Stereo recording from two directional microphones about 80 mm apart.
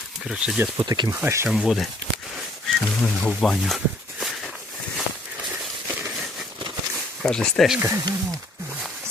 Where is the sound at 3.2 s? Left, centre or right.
Centre.